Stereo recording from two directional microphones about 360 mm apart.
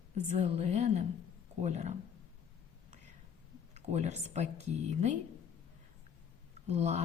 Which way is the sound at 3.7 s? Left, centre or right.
Centre.